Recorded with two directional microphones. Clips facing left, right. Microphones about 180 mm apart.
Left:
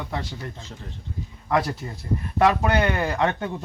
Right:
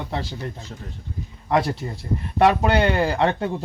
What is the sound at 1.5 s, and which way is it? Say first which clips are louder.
A man's voice: right 2 dB; 25° right (ahead or behind).